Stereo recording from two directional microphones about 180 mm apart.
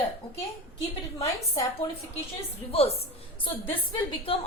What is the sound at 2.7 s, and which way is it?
A woman's voice, 35° left (ahead or behind).